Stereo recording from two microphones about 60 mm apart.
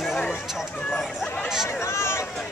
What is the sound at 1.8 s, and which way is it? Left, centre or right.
Speech, left.